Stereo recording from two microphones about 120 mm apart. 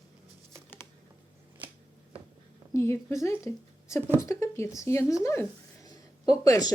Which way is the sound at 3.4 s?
25° left (ahead or behind).